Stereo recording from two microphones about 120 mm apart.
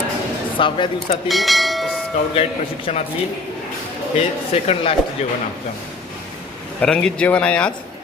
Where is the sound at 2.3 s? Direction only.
55° left (ahead or behind).